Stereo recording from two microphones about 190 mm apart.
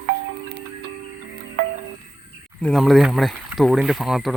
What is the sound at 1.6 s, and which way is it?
Music, 50° right (ahead or behind).